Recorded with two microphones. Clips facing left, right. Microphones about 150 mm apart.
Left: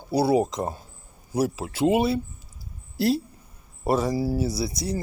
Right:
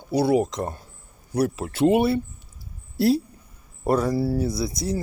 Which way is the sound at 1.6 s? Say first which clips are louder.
Right 2 dB; 20° left (ahead or behind).